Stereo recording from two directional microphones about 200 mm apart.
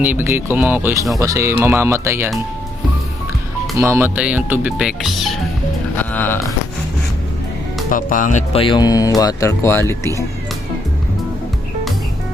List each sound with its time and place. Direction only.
0.0 s speech: 10° right (ahead or behind)
3.8 s speech: 10° right (ahead or behind)
6.0 s music: 10° left (ahead or behind)
7.9 s speech: 40° left (ahead or behind); by 10.1 s 15° left (ahead or behind)